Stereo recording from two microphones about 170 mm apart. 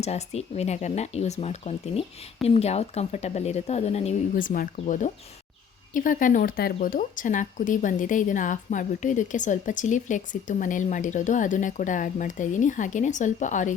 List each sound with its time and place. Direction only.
0.0 s speech: 40° left (ahead or behind)
4.4 s speech: 55° left (ahead or behind)